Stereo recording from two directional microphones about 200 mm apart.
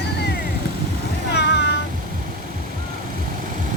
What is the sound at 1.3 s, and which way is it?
Meow, 55° left (ahead or behind).